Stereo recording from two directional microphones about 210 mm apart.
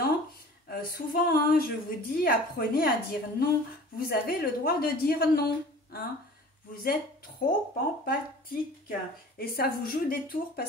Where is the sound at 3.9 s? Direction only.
45° left (ahead or behind).